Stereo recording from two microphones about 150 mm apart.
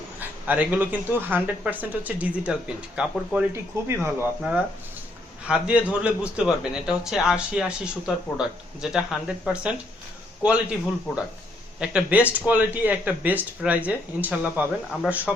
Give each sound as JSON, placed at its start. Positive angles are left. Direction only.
{"t": 0.2, "sound": "speech", "side_deg": -10}
{"t": 3.5, "sound": "speech", "side_deg": -15}